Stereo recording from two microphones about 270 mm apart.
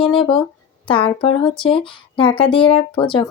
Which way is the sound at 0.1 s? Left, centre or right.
Centre.